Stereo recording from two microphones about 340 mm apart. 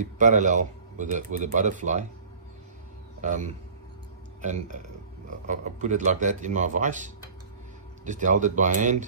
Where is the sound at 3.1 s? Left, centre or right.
Right.